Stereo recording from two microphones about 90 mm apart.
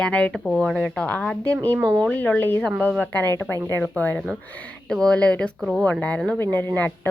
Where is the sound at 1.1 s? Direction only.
15° left (ahead or behind).